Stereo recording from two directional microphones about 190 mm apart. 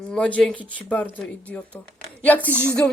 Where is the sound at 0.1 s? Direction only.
5° left (ahead or behind).